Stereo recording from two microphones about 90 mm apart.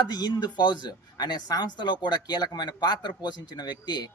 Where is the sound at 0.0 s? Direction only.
50° left (ahead or behind).